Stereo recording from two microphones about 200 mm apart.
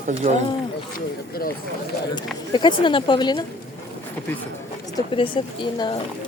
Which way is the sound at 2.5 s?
25° left (ahead or behind).